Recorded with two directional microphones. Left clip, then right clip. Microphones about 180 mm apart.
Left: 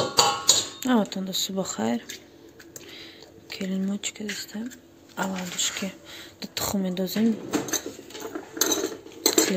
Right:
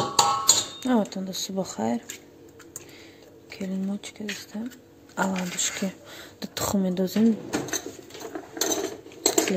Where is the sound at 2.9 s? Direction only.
10° right (ahead or behind).